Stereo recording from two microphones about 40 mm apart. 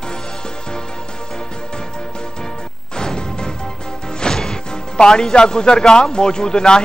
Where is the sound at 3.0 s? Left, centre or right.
Centre.